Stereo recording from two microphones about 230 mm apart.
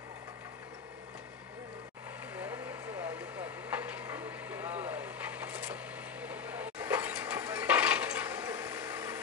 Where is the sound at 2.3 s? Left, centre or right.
Centre.